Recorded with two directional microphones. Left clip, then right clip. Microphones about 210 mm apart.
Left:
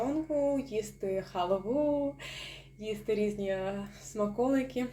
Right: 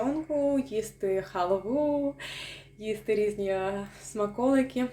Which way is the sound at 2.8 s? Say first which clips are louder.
Right 4 dB; 15° right (ahead or behind).